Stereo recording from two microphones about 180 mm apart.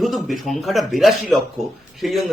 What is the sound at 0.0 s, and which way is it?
A man's voice, centre (ahead or behind).